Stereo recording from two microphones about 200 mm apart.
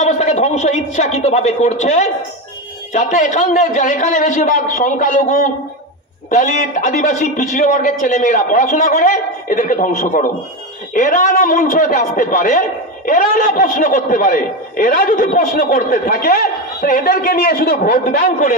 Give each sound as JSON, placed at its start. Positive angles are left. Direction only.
{"t": 0.0, "sound": "a man's voice", "side_deg": 35}